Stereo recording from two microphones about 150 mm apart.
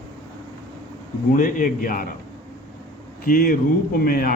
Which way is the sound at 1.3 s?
65° left (ahead or behind).